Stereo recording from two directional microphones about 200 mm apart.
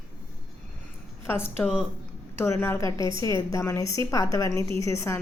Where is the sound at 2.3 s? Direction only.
10° left (ahead or behind).